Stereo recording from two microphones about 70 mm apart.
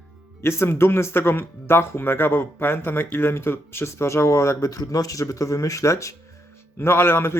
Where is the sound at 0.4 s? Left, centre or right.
Left.